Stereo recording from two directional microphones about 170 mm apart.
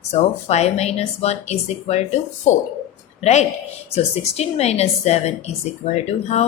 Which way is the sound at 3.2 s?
40° left (ahead or behind).